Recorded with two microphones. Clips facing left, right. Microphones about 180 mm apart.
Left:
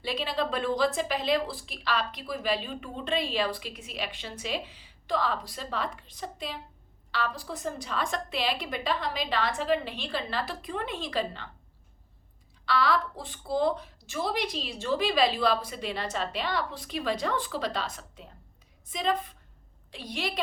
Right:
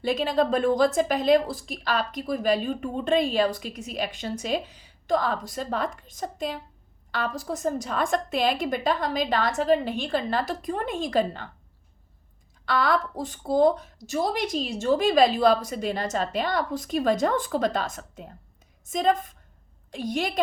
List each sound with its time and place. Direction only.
0.0 s a woman's voice: 45° right (ahead or behind)
12.6 s a woman's voice: 50° right (ahead or behind)